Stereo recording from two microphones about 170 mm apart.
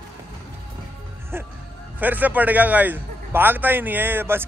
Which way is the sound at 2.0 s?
10° right (ahead or behind).